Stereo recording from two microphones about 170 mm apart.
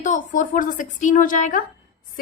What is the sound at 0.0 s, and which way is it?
A woman's voice, 45° left (ahead or behind).